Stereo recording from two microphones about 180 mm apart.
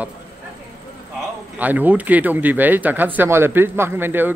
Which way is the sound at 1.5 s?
10° right (ahead or behind).